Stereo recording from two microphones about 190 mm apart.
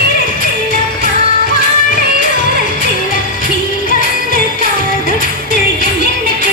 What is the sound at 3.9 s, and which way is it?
Music, 45° left (ahead or behind).